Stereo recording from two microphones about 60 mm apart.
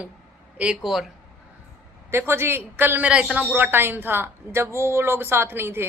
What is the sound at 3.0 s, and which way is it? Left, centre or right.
A woman's voice, right.